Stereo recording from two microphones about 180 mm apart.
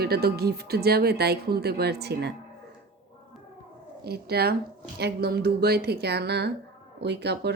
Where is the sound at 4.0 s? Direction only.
60° right (ahead or behind).